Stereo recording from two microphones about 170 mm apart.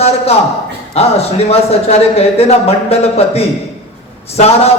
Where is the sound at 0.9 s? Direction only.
35° left (ahead or behind).